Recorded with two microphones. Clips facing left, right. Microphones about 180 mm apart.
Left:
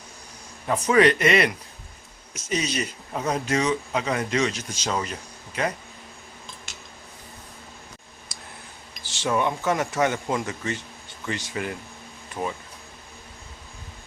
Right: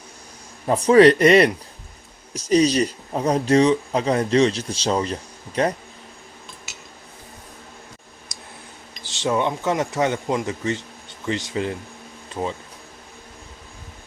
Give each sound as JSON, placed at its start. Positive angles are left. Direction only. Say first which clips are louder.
{"t": 0.7, "sound": "speech", "louder": "right 6 dB", "side_deg": -35}
{"t": 9.0, "sound": "speech", "louder": "right 2 dB", "side_deg": -20}